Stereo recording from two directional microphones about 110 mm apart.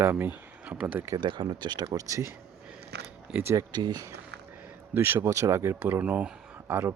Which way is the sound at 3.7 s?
40° right (ahead or behind).